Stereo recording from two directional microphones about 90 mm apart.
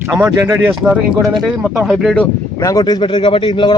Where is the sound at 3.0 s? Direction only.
80° left.